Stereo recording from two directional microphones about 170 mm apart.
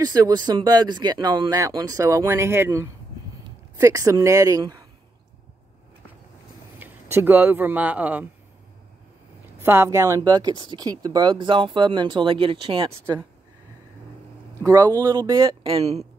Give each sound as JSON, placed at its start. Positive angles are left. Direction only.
{"t": 0.0, "sound": "speech", "side_deg": -20}
{"t": 6.8, "sound": "speech", "side_deg": -15}
{"t": 9.6, "sound": "speech", "side_deg": -15}
{"t": 14.7, "sound": "speech", "side_deg": -20}